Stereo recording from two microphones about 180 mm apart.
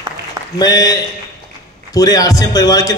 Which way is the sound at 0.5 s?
20° left (ahead or behind).